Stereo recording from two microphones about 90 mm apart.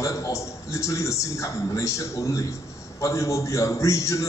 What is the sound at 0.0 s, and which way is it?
A man's voice, 35° left (ahead or behind).